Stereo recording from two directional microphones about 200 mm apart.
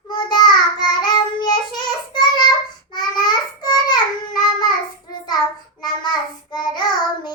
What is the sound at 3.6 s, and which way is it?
Child singing, 20° left (ahead or behind).